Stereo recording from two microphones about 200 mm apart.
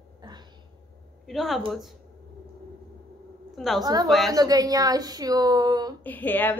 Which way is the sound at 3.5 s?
Centre (ahead or behind).